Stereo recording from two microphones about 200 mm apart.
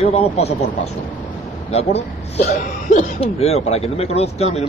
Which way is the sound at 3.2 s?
30° left (ahead or behind).